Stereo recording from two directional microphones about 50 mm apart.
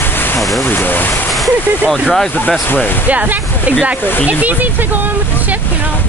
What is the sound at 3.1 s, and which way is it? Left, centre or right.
Speech, right.